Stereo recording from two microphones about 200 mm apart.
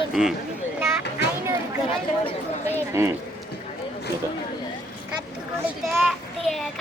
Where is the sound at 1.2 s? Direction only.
55° left (ahead or behind).